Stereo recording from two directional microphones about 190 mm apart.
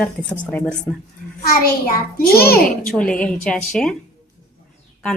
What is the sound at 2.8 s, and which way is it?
A woman's voice, 5° left (ahead or behind).